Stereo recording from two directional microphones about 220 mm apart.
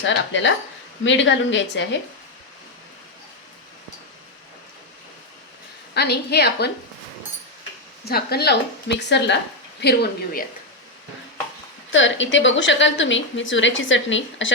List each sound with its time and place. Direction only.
0.0 s a woman's voice: 55° left (ahead or behind)
5.9 s a woman's voice: 50° left (ahead or behind)
8.0 s a woman's voice: 45° left (ahead or behind)
11.9 s a woman's voice: 60° left (ahead or behind)